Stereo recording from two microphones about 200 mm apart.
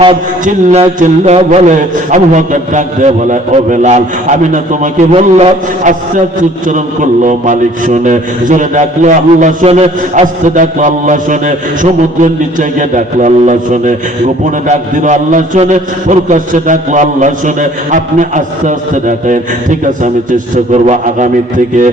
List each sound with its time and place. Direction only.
0.4 s a man's voice: 35° right (ahead or behind)
20.8 s a man's voice: 35° right (ahead or behind)